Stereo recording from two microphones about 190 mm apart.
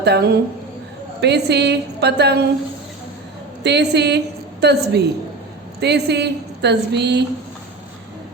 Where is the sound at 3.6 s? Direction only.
60° right (ahead or behind).